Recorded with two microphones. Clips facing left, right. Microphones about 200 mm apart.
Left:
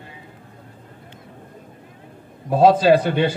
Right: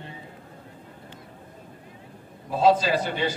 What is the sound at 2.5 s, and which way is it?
Speech, 55° left (ahead or behind).